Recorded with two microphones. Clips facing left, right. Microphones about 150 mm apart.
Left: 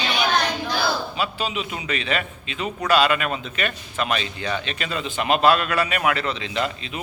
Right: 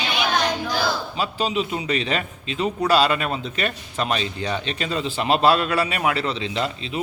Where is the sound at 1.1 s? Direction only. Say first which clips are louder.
Right 3 dB; 35° right (ahead or behind).